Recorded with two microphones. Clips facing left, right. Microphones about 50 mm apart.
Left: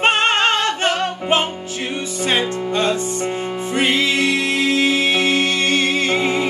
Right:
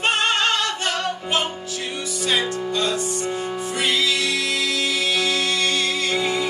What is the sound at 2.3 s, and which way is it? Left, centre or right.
Music, left.